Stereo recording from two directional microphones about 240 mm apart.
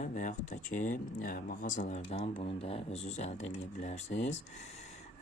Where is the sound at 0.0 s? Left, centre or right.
Left.